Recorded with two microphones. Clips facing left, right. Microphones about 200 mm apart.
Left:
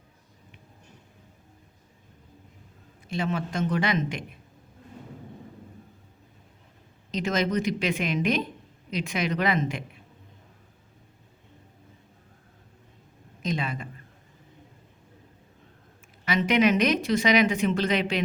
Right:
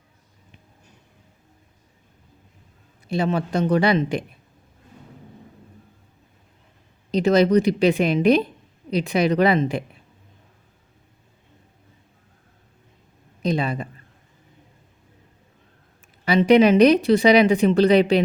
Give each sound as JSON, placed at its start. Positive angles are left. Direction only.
{"t": 3.1, "sound": "speech", "side_deg": -35}
{"t": 7.1, "sound": "speech", "side_deg": -35}
{"t": 13.4, "sound": "speech", "side_deg": -35}
{"t": 16.2, "sound": "speech", "side_deg": -35}